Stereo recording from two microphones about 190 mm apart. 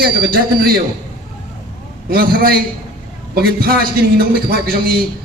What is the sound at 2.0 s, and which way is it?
A man's voice, 50° right (ahead or behind).